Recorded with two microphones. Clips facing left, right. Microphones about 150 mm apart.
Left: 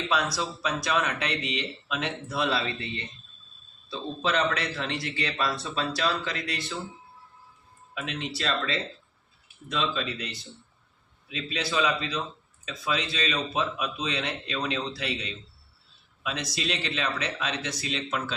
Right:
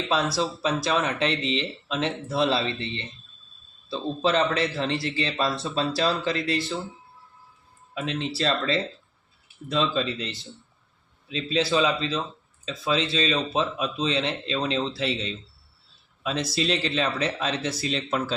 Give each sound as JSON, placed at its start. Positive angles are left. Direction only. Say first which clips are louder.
{"t": 0.3, "sound": "a man's voice", "louder": "right 5 dB", "side_deg": -30}
{"t": 7.9, "sound": "a man's voice", "louder": "right 5 dB", "side_deg": -30}